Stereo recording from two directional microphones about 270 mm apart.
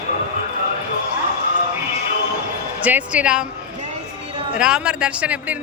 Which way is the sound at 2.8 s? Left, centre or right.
Centre.